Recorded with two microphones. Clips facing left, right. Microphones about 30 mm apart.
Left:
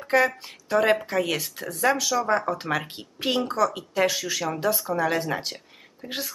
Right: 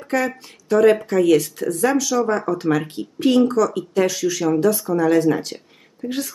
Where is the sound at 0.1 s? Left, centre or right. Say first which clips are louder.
Even; left.